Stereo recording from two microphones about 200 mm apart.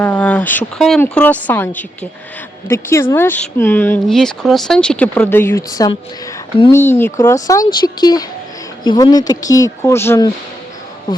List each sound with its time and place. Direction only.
0.0 s speech: 5° left (ahead or behind)